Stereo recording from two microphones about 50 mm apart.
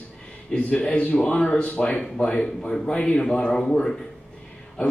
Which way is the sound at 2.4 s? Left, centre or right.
Centre.